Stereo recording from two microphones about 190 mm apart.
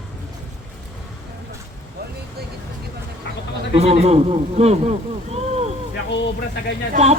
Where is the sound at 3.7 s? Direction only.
30° right (ahead or behind).